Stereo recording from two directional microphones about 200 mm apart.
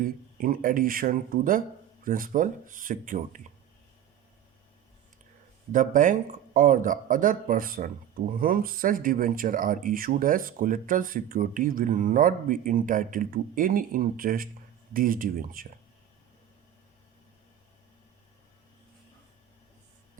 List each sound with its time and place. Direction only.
0.0 s speech: 45° right (ahead or behind)
5.7 s speech: 40° right (ahead or behind)